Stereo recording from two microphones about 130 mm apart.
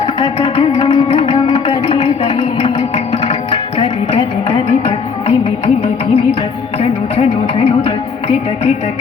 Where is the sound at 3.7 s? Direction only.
35° left (ahead or behind).